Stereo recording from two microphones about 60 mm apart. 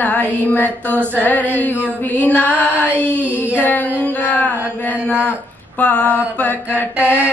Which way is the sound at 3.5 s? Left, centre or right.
Left.